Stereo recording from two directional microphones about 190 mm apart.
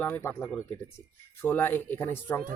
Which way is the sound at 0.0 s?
15° left (ahead or behind).